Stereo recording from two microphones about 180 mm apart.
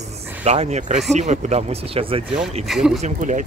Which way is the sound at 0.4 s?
40° right (ahead or behind).